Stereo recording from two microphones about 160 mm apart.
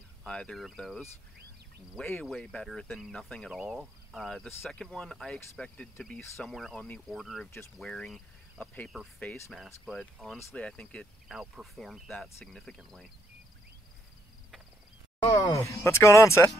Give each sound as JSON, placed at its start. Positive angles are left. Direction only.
{"t": 0.2, "sound": "speech", "side_deg": 5}
{"t": 15.2, "sound": "speech", "side_deg": 20}